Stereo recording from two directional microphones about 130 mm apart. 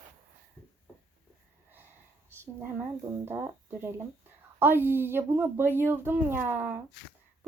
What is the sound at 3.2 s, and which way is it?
Speech, 20° right (ahead or behind).